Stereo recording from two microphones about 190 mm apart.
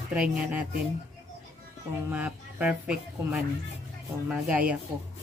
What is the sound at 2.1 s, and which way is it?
Speech, 5° right (ahead or behind).